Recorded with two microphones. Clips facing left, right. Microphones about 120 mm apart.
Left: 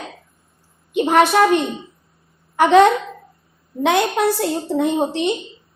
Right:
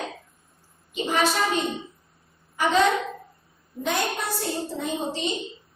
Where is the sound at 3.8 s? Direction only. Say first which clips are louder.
Left 10 dB; 85° left; by 5.3 s 65° left (ahead or behind).